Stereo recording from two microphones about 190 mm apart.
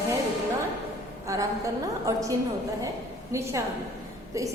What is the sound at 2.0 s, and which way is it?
A woman's voice, 15° right (ahead or behind).